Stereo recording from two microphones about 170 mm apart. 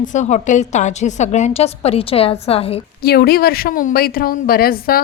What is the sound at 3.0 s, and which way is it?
A woman's voice, 65° left (ahead or behind).